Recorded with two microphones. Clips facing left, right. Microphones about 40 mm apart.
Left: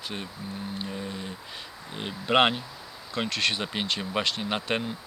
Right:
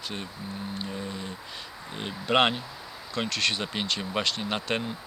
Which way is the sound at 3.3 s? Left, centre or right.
Left.